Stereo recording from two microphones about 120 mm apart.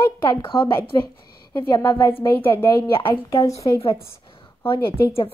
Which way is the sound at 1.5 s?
35° left (ahead or behind).